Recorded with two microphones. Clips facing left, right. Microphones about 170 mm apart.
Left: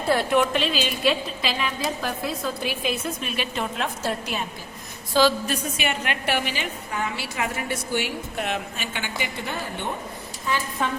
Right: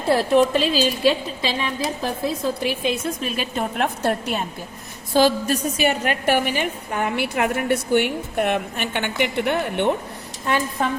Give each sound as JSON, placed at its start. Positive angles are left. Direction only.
{"t": 0.1, "sound": "a woman's voice", "side_deg": -30}
{"t": 5.1, "sound": "a woman's voice", "side_deg": -45}